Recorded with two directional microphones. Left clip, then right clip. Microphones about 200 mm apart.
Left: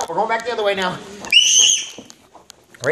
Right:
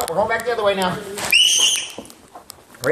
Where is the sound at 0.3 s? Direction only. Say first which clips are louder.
Even; 5° left (ahead or behind).